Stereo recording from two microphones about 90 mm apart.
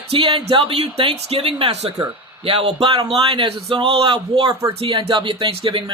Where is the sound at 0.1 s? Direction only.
75° right (ahead or behind).